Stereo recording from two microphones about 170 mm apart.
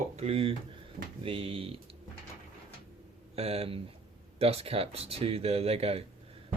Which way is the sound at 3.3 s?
35° right (ahead or behind).